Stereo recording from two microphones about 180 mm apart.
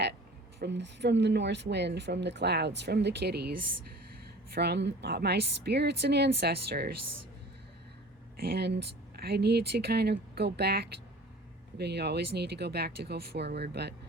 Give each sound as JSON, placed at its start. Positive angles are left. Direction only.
{"t": 0.6, "sound": "speech", "side_deg": -75}
{"t": 4.5, "sound": "speech", "side_deg": -65}
{"t": 8.4, "sound": "speech", "side_deg": -65}